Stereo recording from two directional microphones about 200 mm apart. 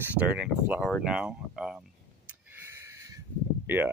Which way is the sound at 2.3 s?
15° right (ahead or behind).